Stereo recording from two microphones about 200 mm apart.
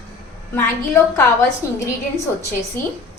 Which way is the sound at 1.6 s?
15° left (ahead or behind).